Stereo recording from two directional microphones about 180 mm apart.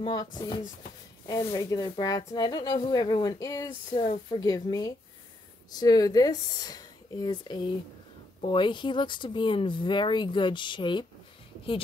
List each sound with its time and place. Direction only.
0.0 s speech: 20° left (ahead or behind)